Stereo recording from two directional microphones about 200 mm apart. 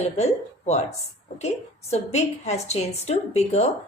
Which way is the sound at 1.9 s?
35° left (ahead or behind).